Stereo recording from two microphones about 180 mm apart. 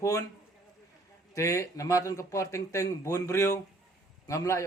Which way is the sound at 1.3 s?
15° left (ahead or behind).